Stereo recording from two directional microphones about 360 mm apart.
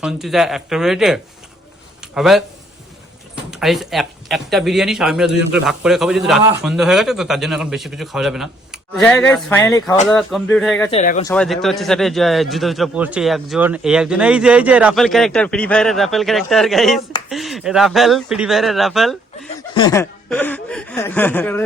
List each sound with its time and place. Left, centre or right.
0.0 s speech: centre
3.5 s speech: centre
10.9 s speech: centre
11.3 s speech: centre
19.5 s speech: centre